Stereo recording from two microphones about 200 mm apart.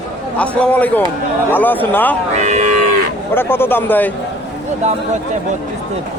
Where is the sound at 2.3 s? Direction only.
35° right (ahead or behind).